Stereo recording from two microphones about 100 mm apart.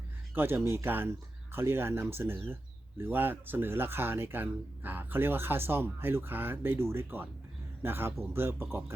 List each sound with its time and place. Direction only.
0.3 s speech: 20° right (ahead or behind)